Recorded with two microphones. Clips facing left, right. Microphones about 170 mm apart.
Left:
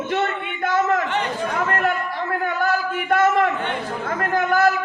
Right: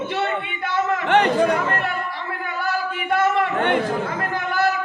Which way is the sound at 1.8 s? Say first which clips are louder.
Left 4 dB; 45° left (ahead or behind).